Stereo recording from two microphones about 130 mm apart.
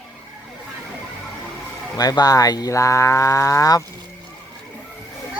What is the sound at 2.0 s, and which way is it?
Cricket, 30° left (ahead or behind).